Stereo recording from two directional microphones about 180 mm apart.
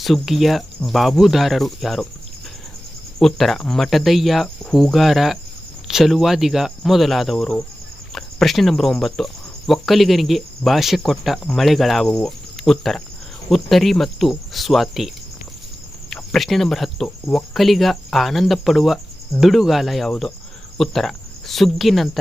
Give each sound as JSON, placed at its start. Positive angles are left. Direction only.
{"t": 0.0, "sound": "speech", "side_deg": 0}
{"t": 3.2, "sound": "speech", "side_deg": 0}